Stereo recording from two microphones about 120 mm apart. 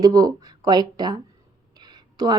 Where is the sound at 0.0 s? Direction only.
30° right (ahead or behind).